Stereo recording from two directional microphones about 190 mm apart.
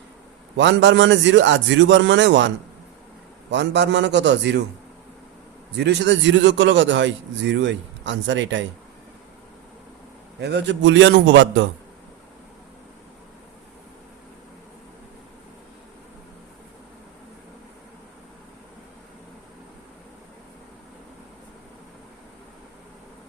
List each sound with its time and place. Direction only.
0.5 s speech: 75° right (ahead or behind)
3.5 s speech: 70° right (ahead or behind)
5.7 s speech: 65° right (ahead or behind)
10.4 s speech: 65° right (ahead or behind)